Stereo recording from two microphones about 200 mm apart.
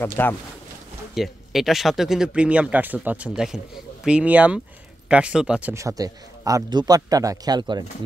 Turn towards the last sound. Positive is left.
turn(degrees=-20)  # may be behind; listen again after turning